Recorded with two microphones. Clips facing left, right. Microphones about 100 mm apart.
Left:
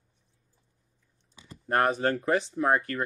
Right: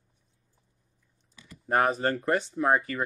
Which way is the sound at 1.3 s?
25° left (ahead or behind).